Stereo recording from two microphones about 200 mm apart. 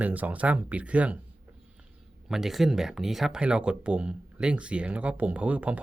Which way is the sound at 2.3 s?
Centre (ahead or behind).